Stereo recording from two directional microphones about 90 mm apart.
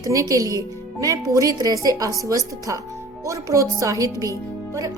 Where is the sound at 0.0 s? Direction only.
40° right (ahead or behind).